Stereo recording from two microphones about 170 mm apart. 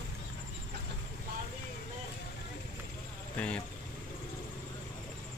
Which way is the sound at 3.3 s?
5° left (ahead or behind).